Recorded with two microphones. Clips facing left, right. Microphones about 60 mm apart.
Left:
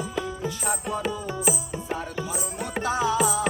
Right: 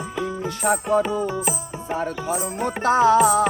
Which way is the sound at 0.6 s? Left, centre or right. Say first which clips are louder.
Right 10 dB; right.